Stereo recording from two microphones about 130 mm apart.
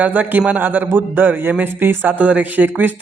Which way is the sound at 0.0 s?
15° right (ahead or behind).